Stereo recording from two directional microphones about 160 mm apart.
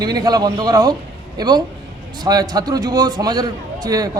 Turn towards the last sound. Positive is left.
turn(degrees=-25)  # may be behind; listen again after turning